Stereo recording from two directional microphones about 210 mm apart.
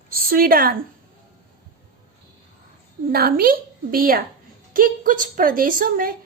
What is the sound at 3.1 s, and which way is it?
A woman's voice, 45° right (ahead or behind).